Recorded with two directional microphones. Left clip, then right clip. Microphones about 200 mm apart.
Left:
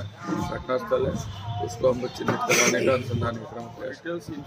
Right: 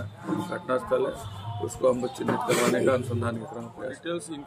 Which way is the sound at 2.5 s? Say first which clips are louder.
Left 4 dB; 20° right (ahead or behind).